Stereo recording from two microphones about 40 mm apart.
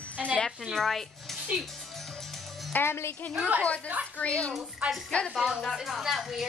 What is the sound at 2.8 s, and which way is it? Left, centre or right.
Speech, left.